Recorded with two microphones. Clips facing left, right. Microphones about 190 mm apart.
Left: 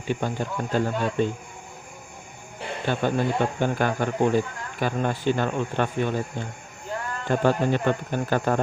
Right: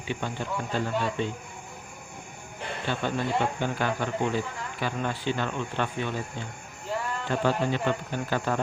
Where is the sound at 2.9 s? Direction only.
50° left (ahead or behind).